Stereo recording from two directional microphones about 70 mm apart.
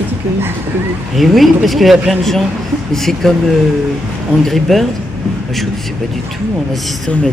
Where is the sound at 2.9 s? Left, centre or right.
Centre.